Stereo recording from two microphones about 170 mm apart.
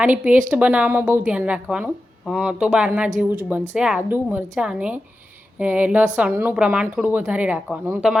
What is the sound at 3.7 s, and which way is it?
A woman's voice, 5° right (ahead or behind).